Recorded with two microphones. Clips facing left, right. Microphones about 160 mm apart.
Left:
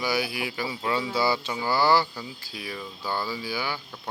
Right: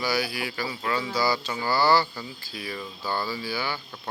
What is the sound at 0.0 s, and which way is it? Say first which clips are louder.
Speech: even; 20° left (ahead or behind).